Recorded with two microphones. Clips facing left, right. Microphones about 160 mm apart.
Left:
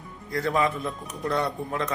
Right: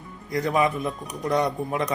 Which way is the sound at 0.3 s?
15° right (ahead or behind).